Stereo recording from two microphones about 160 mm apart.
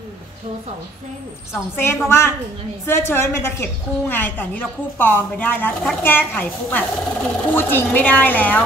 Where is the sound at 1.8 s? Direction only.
15° left (ahead or behind).